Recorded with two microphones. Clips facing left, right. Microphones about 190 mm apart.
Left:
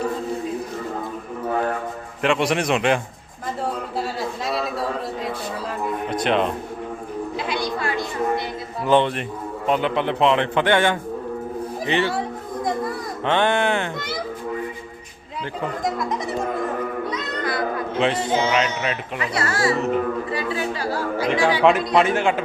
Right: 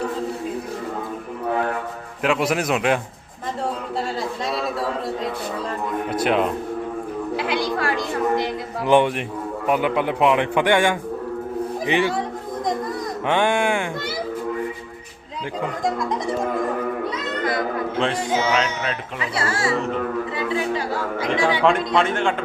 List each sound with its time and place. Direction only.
2.2 s a man's voice: 5° right (ahead or behind)
4.4 s a sound: centre (ahead or behind)
6.1 s speech: 5° right (ahead or behind)
8.8 s a man's voice: 10° right (ahead or behind)
13.2 s a man's voice: 10° right (ahead or behind)
18.3 s a man's voice: 10° right (ahead or behind)
18.5 s a man's voice: 5° left (ahead or behind)
19.4 s speech: 25° right (ahead or behind)
21.6 s a man's voice: 5° left (ahead or behind)